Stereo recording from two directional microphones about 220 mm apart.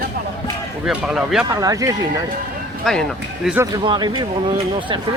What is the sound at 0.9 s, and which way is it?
Speech, 5° right (ahead or behind).